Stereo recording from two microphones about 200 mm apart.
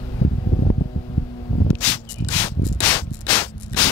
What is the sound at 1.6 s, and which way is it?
Rub, 5° left (ahead or behind).